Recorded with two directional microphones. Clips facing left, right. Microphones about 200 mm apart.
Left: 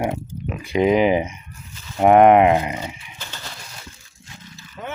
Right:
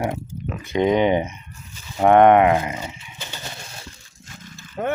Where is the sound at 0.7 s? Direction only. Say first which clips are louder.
Left 1 dB; 10° left (ahead or behind).